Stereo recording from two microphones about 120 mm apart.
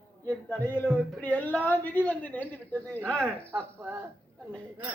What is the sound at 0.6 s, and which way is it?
A woman's voice, 20° left (ahead or behind).